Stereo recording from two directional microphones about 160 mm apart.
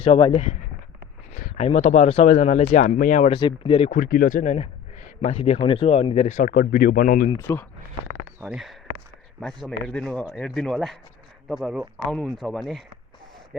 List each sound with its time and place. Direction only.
0.0 s speech: 35° left (ahead or behind)
1.4 s speech: 45° left (ahead or behind)
3.2 s speech: 30° left (ahead or behind)
3.9 s speech: 60° left (ahead or behind)
7.3 s speech: 15° left (ahead or behind)
8.4 s speech: 5° right (ahead or behind)